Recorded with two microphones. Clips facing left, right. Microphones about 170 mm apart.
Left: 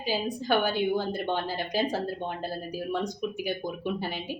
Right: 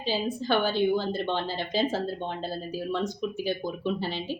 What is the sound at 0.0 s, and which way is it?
Speech, 15° left (ahead or behind).